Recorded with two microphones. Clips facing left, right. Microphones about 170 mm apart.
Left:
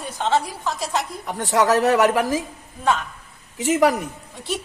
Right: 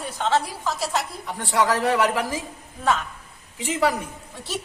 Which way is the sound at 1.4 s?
45° left (ahead or behind).